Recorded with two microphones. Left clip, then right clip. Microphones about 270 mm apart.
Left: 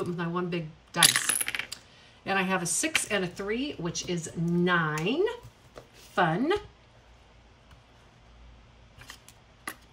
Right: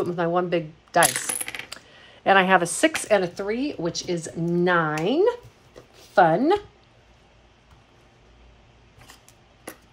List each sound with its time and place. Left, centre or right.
0.0 s speech: centre